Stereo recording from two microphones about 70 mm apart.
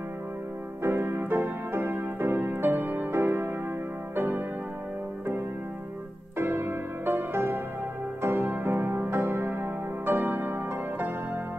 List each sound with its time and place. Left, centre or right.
0.8 s music: right
6.3 s music: right